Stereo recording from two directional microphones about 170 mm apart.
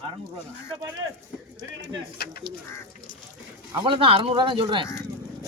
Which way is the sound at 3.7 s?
30° right (ahead or behind).